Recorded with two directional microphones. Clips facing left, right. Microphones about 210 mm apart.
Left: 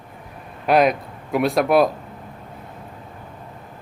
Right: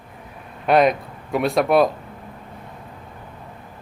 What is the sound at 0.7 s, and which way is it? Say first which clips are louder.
Speech: even; centre (ahead or behind).